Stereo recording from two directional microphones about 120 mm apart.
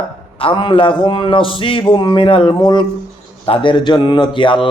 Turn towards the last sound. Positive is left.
turn(degrees=45)  # may be behind; listen again after turning